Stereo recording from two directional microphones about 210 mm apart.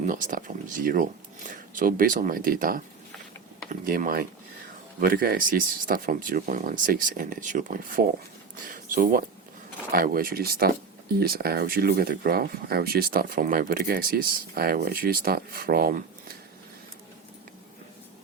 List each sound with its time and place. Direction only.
0.0 s speech: 40° right (ahead or behind)